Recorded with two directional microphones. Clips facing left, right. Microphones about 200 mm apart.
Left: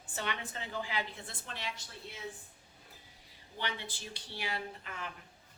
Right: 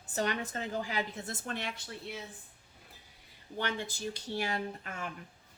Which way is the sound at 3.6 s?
45° right (ahead or behind).